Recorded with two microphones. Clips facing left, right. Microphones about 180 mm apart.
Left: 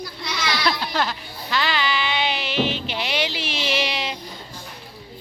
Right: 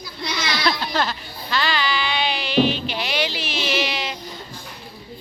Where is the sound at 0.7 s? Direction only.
10° left (ahead or behind).